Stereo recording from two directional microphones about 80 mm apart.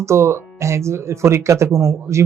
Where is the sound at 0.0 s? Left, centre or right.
Right.